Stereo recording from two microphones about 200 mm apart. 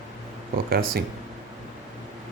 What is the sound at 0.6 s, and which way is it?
Speech, 50° right (ahead or behind).